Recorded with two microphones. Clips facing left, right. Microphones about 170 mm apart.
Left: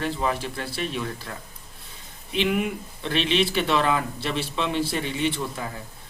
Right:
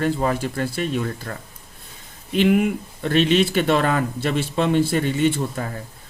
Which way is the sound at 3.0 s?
45° right (ahead or behind).